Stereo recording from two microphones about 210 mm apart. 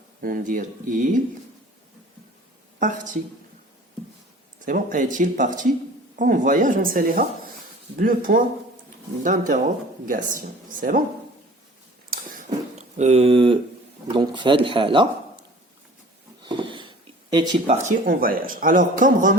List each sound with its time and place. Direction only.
0.2 s speech: 40° right (ahead or behind)
2.7 s speech: 35° right (ahead or behind)
4.6 s speech: 40° right (ahead or behind)
12.1 s a sound: 40° right (ahead or behind)
13.0 s speech: 30° right (ahead or behind)
16.4 s a sound: 20° right (ahead or behind)
17.8 s speech: 40° right (ahead or behind)